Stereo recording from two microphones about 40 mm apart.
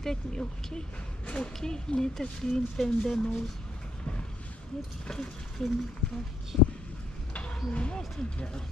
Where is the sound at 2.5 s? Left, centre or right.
Centre.